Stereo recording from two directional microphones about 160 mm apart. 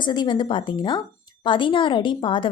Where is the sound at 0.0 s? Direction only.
30° left (ahead or behind).